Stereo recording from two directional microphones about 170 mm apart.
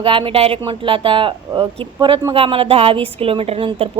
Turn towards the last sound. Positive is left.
turn(degrees=-35)  # may be behind; listen again after turning